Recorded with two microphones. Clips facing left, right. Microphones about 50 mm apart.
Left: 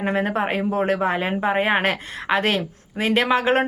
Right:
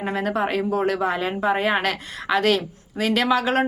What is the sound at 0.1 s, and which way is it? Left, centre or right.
Speech, left.